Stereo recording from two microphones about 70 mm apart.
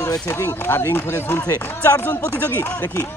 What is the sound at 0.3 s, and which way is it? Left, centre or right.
Speech, left.